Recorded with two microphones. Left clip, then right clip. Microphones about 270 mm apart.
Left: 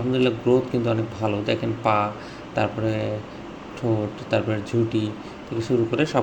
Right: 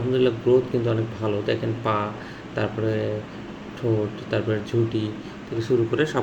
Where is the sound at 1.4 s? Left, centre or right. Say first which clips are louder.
Left 2 dB; centre.